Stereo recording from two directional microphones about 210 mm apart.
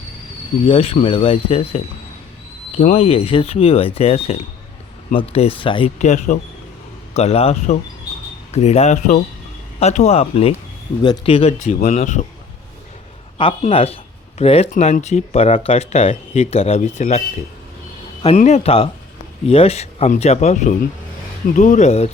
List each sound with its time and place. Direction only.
0.7 s speech: 25° left (ahead or behind)
6.0 s speech: 35° left (ahead or behind)
13.6 s speech: 25° left (ahead or behind)